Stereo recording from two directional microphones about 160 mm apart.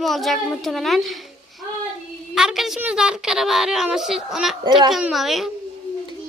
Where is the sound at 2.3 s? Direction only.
5° right (ahead or behind).